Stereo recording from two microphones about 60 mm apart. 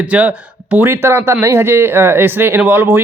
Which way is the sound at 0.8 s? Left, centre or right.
Right.